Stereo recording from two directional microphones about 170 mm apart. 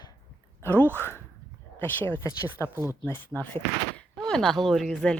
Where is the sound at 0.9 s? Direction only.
15° left (ahead or behind).